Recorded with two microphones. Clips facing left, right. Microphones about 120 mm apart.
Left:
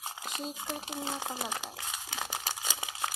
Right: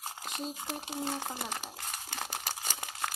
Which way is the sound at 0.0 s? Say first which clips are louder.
Even; centre (ahead or behind).